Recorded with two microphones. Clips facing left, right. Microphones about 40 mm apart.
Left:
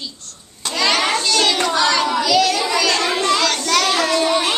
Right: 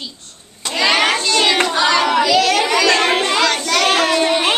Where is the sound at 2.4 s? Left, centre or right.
Right.